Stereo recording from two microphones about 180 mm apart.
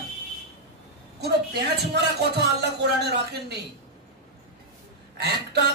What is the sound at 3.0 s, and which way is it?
Speech, 65° right (ahead or behind).